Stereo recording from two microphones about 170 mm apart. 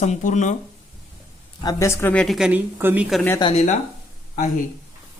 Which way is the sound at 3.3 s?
30° left (ahead or behind).